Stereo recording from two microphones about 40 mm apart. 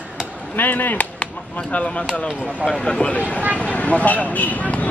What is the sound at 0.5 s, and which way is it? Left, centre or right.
Speech, left.